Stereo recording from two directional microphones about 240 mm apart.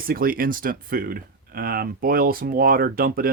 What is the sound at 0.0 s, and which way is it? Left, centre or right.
Speech, right.